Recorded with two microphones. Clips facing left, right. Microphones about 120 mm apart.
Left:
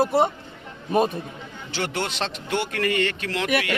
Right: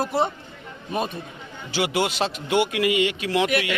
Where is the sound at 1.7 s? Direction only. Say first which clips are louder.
Right 4 dB; 10° right (ahead or behind).